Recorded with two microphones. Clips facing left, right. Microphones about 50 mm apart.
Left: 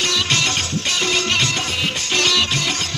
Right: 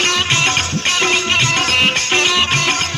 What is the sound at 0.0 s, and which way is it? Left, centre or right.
Music, right.